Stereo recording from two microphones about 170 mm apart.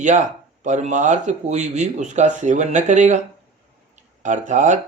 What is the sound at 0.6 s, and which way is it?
Speech, 45° right (ahead or behind).